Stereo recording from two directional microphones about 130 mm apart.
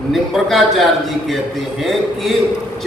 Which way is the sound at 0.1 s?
Centre (ahead or behind).